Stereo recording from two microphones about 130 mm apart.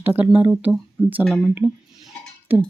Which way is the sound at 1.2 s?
5° left (ahead or behind).